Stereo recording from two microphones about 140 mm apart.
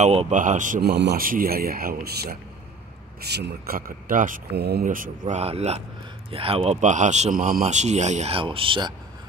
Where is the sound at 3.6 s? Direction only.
90° right; by 5.4 s 70° right (ahead or behind).